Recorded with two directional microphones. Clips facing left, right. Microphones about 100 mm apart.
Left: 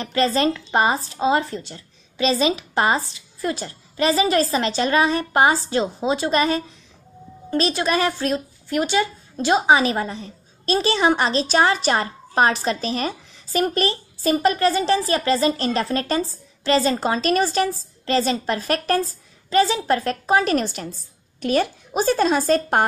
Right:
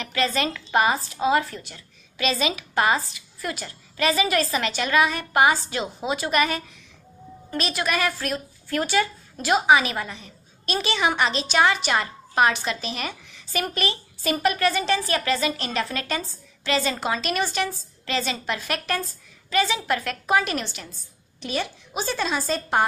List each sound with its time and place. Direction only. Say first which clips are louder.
0.0 s a woman's voice: left 5 dB; 35° left (ahead or behind); by 22.8 s 50° left (ahead or behind)